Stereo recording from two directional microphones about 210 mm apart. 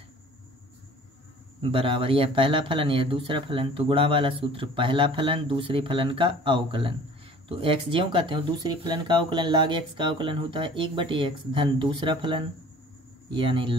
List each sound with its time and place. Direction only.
1.6 s speech: 25° right (ahead or behind)